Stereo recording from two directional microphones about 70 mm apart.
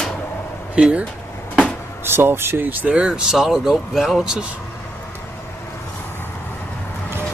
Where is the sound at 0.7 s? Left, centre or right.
Centre.